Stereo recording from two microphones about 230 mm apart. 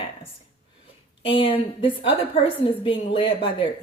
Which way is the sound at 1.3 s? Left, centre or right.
Left.